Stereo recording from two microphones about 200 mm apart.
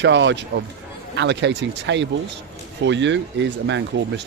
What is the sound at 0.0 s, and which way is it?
Speech, 60° right (ahead or behind).